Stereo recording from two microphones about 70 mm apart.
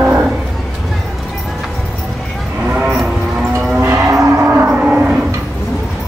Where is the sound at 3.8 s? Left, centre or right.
Right.